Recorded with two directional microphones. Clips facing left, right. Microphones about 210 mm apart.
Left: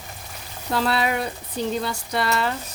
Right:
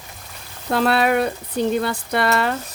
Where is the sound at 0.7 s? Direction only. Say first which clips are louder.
Right 5 dB; 60° right (ahead or behind).